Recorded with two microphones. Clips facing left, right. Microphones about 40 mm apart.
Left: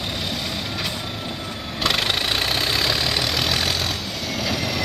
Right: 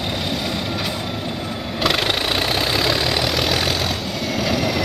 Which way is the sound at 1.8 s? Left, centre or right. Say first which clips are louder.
Right 2 dB; centre.